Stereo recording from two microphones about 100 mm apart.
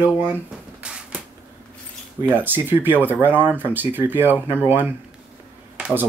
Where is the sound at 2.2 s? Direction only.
20° right (ahead or behind).